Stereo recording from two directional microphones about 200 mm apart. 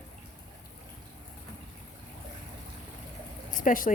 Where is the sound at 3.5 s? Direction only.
40° left (ahead or behind).